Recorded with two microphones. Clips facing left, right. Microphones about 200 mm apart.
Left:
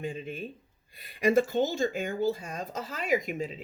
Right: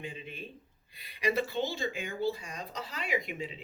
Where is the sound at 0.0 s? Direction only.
45° left (ahead or behind).